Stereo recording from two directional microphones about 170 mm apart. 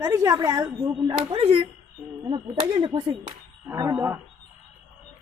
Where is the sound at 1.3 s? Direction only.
35° right (ahead or behind); by 4.1 s 20° right (ahead or behind).